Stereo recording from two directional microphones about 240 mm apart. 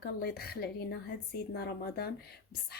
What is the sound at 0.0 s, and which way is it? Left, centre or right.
A woman's voice, left.